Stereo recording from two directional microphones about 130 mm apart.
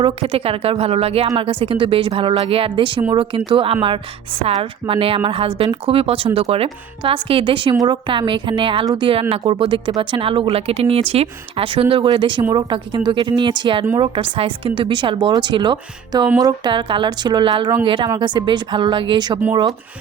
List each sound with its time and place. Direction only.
0.0 s speech: 45° right (ahead or behind)